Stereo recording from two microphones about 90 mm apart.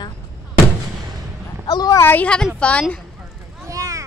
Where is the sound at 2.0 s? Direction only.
15° left (ahead or behind).